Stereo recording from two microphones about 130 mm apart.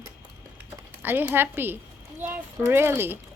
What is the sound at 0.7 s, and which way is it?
A woman's voice, 15° right (ahead or behind).